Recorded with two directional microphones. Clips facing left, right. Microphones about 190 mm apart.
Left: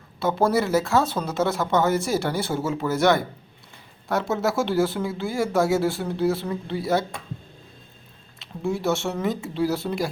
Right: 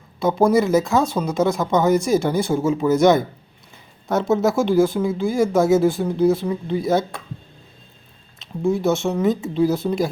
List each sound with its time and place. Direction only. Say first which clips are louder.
0.2 s speech: right 5 dB; 15° right (ahead or behind)
8.4 s speech: right 6 dB; 20° right (ahead or behind)